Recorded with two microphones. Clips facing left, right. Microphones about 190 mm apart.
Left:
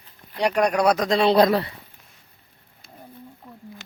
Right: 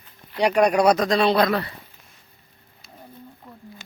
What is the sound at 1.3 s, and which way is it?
Speech, 35° left (ahead or behind).